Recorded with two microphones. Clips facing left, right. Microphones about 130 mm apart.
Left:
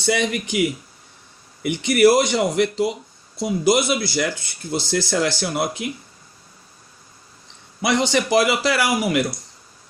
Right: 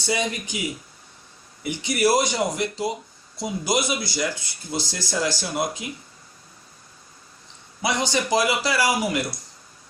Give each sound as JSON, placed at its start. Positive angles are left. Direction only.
{"t": 0.0, "sound": "speech", "side_deg": 65}
{"t": 7.9, "sound": "speech", "side_deg": 65}